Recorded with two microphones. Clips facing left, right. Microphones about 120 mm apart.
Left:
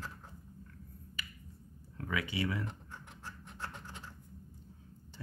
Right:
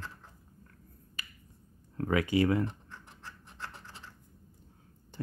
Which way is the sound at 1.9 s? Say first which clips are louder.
Right 9 dB; 45° right (ahead or behind).